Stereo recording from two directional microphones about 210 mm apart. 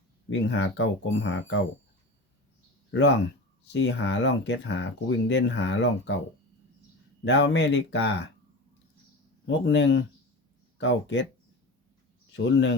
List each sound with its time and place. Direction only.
0.3 s speech: 60° left (ahead or behind)
2.9 s speech: 60° left (ahead or behind)
7.3 s speech: 60° left (ahead or behind)
9.5 s speech: 55° left (ahead or behind)
12.4 s speech: 55° left (ahead or behind)